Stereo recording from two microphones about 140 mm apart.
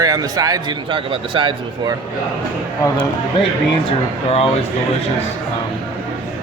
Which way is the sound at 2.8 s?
30° left (ahead or behind).